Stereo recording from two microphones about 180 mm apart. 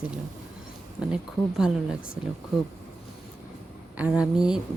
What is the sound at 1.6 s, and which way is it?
Speech, 5° right (ahead or behind).